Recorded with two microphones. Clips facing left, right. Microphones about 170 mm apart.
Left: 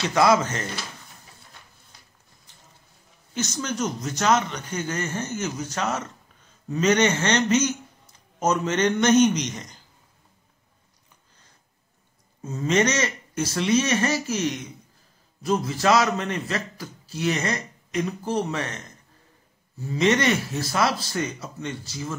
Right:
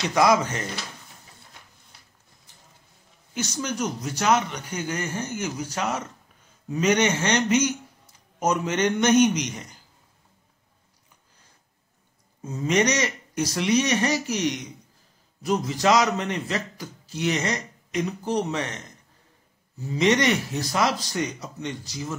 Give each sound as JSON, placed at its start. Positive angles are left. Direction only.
{"t": 0.0, "sound": "speech", "side_deg": -15}
{"t": 3.3, "sound": "speech", "side_deg": -10}
{"t": 12.4, "sound": "a man's voice", "side_deg": -15}